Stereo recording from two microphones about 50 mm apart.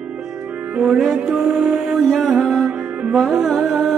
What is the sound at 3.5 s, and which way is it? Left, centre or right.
Music, right.